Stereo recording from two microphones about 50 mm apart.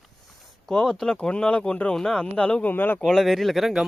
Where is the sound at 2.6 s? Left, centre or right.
Left.